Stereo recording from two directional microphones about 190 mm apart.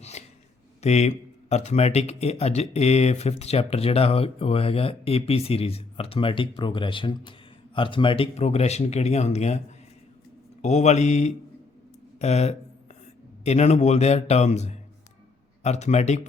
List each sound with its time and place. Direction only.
0.2 s a sound: 35° left (ahead or behind)
0.8 s speech: 35° left (ahead or behind)
10.6 s speech: 35° left (ahead or behind)